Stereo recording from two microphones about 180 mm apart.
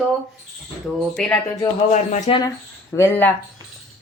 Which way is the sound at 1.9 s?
40° left (ahead or behind).